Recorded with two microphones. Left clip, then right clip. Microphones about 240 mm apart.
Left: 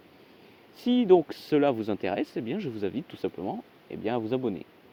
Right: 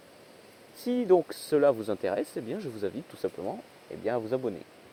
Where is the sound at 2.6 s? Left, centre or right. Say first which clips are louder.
Left 2 dB; left.